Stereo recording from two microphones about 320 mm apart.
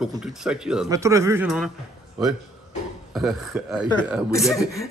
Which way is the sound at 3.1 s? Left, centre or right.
Centre.